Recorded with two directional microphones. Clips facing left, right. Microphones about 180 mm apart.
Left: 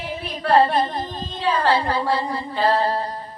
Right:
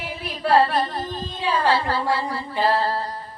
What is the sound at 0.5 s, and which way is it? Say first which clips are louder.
Humming: left 2 dB; 20° left (ahead or behind).